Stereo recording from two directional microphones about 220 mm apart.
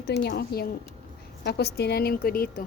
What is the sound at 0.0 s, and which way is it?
Speech, 45° left (ahead or behind).